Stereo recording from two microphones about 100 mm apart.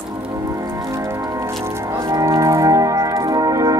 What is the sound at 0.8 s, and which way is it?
Music, 30° right (ahead or behind).